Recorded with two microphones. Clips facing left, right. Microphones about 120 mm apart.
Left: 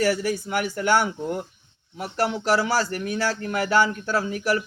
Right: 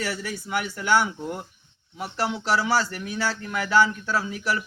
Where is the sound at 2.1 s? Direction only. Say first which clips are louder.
Left 3 dB; 45° left (ahead or behind).